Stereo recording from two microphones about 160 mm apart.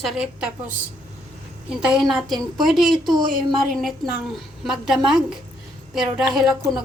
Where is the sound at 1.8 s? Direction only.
5° right (ahead or behind).